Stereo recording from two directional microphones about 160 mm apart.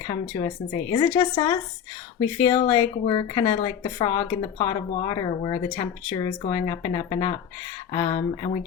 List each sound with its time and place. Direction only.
0.1 s speech: 30° left (ahead or behind)